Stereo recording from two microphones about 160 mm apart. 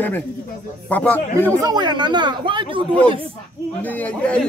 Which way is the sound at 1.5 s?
25° right (ahead or behind).